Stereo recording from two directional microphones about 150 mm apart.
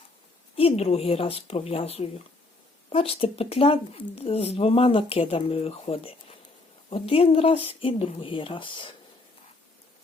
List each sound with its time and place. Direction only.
0.5 s speech: 40° left (ahead or behind)